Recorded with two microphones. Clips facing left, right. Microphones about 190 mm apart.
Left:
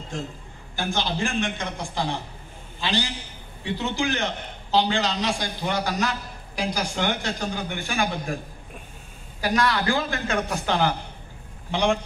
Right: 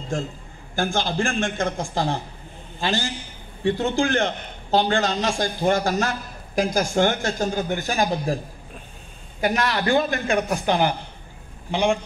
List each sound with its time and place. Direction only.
0.7 s a man's voice: 50° right (ahead or behind)
9.4 s a man's voice: 25° right (ahead or behind); by 12.0 s 5° right (ahead or behind)